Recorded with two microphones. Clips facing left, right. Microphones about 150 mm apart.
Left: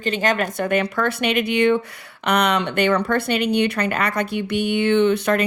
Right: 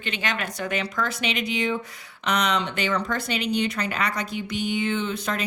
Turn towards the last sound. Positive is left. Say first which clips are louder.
# left 10 dB
turn(degrees=65)  # may be behind; listen again after turning